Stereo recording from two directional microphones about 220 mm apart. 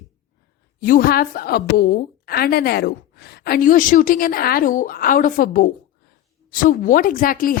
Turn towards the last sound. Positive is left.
turn(degrees=40)  # may be behind; listen again after turning